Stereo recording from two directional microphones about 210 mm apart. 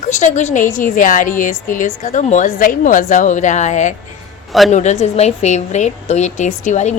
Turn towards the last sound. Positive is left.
turn(degrees=35)  # may be behind; listen again after turning